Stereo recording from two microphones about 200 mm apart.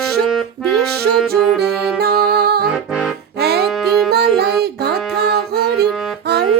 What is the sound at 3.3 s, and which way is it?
Music, 55° right (ahead or behind).